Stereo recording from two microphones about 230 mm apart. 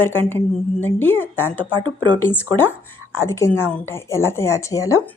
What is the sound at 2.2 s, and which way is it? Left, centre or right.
Speech, centre.